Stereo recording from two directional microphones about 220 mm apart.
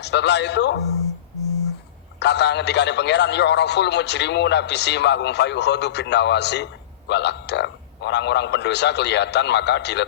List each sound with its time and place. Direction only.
0.0 s a man's voice: 50° left (ahead or behind)
2.1 s a man's voice: 50° left (ahead or behind)